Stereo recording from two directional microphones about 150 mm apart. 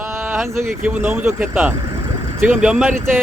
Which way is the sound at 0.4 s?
15° right (ahead or behind).